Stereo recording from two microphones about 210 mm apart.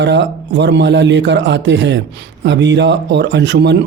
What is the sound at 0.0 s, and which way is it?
A man's voice, 60° right (ahead or behind).